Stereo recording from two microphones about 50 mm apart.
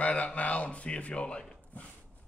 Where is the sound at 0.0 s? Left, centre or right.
Left.